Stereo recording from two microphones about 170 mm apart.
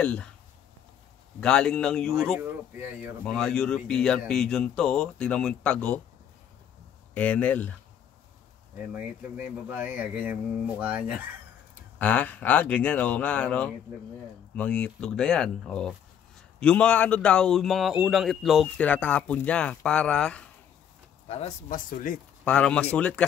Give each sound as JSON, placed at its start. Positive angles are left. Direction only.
{"t": 0.0, "sound": "a man's voice", "side_deg": 5}
{"t": 1.4, "sound": "speech", "side_deg": 5}
{"t": 7.2, "sound": "a man's voice", "side_deg": 10}
{"t": 9.4, "sound": "speech", "side_deg": -10}
{"t": 12.0, "sound": "a man's voice", "side_deg": 10}
{"t": 21.3, "sound": "speech", "side_deg": 40}
{"t": 22.4, "sound": "a man's voice", "side_deg": 5}